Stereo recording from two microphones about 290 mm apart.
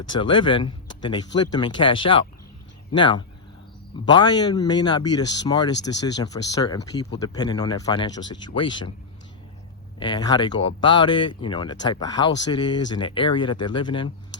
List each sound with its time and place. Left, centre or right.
0.1 s speech: centre
10.0 s speech: centre